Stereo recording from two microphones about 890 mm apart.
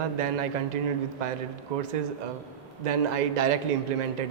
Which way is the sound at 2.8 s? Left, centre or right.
Right.